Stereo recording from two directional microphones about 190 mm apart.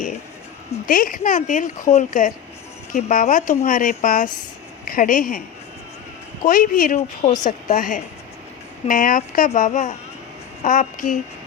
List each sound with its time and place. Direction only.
0.9 s speech: 45° left (ahead or behind)
6.5 s speech: 45° left (ahead or behind)